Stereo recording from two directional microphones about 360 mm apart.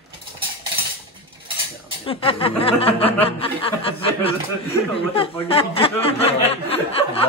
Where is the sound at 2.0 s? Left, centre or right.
Centre.